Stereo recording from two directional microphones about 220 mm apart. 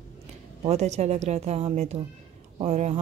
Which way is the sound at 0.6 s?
30° right (ahead or behind).